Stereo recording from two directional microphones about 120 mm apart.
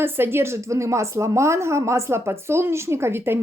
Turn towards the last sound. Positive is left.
turn(degrees=-20)  # may be behind; listen again after turning